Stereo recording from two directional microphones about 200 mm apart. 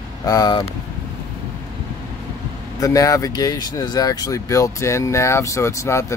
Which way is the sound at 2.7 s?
15° left (ahead or behind).